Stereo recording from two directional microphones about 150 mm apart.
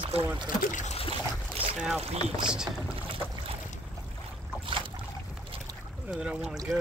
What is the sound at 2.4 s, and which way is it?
Speech, 5° right (ahead or behind).